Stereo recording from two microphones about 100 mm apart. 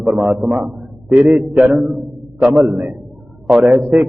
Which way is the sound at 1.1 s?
20° right (ahead or behind).